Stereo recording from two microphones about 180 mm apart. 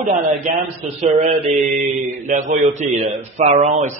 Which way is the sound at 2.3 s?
45° right (ahead or behind).